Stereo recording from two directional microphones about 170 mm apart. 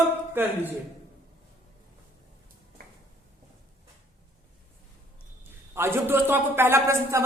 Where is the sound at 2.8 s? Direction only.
60° right (ahead or behind).